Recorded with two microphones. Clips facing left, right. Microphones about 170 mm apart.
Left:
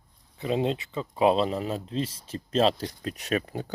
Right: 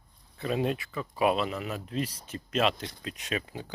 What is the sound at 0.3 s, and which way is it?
Speech, 20° left (ahead or behind).